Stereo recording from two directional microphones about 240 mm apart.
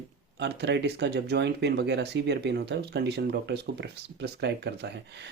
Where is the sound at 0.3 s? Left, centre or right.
Right.